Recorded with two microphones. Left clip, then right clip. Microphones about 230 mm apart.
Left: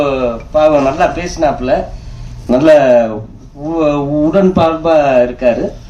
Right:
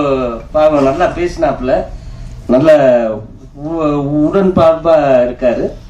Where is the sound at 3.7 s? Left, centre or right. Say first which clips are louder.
Left 2 dB; left.